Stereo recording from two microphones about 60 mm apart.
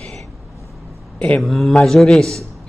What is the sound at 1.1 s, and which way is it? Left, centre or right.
Speech, left.